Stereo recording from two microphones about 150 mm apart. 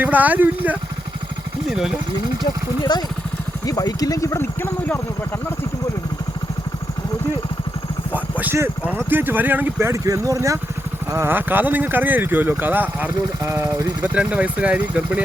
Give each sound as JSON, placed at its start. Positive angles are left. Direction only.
{"t": 0.0, "sound": "speech", "side_deg": -10}
{"t": 2.4, "sound": "speech", "side_deg": 30}
{"t": 8.1, "sound": "speech", "side_deg": -10}